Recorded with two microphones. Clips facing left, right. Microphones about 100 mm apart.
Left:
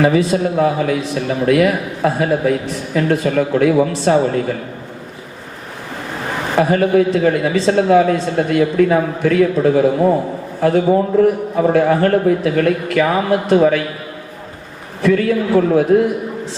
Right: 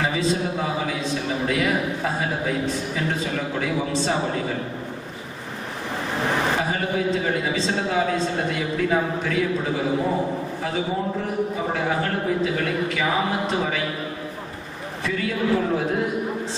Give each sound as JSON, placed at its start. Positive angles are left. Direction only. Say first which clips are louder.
{"t": 0.0, "sound": "a man's voice", "louder": "left 9 dB", "side_deg": 60}
{"t": 6.6, "sound": "a man's voice", "louder": "left 11 dB", "side_deg": 60}
{"t": 15.0, "sound": "a man's voice", "louder": "left 10 dB", "side_deg": 55}